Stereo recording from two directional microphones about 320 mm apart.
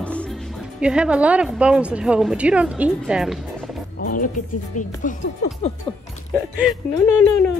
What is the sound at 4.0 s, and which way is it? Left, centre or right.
Speech, left.